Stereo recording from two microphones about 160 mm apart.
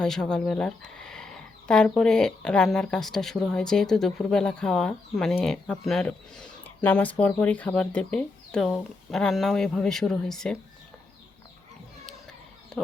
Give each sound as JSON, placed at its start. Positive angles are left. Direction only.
{"t": 0.0, "sound": "speech", "side_deg": 5}